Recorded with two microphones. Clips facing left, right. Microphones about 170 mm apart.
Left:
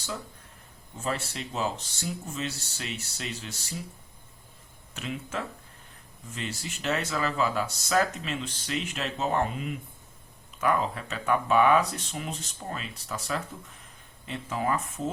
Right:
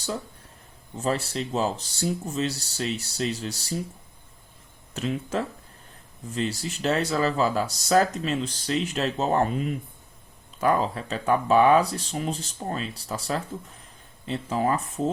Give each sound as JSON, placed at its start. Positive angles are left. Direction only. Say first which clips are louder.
{"t": 0.9, "sound": "speech", "louder": "right 6 dB", "side_deg": -35}
{"t": 4.9, "sound": "speech", "louder": "right 7 dB", "side_deg": -35}